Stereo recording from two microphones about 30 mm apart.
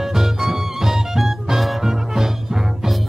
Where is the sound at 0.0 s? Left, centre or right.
Centre.